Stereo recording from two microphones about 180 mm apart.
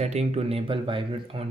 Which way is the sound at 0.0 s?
35° right (ahead or behind).